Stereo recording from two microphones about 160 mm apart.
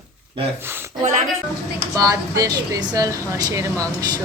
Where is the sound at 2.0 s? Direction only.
20° right (ahead or behind).